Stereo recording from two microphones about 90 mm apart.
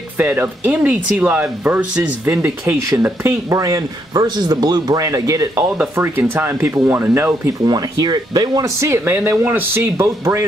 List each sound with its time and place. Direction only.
0.2 s speech: 20° right (ahead or behind)
3.5 s a man's voice: 40° right (ahead or behind)
5.6 s speech: 25° right (ahead or behind)
7.6 s speech: 50° right (ahead or behind)
8.6 s speech: 30° right (ahead or behind)